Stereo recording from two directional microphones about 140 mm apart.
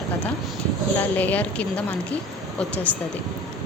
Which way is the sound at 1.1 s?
10° left (ahead or behind).